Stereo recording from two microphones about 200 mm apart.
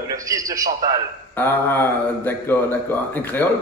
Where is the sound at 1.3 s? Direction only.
10° left (ahead or behind).